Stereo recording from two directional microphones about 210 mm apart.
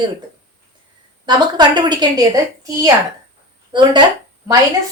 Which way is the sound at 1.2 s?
20° right (ahead or behind).